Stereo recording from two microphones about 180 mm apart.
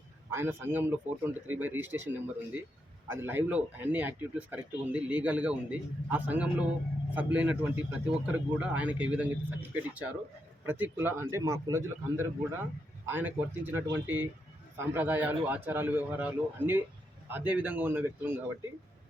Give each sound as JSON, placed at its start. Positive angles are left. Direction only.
{"t": 0.3, "sound": "speech", "side_deg": -10}